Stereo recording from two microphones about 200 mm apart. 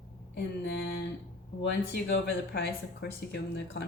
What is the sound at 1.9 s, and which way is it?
Speech, 55° left (ahead or behind).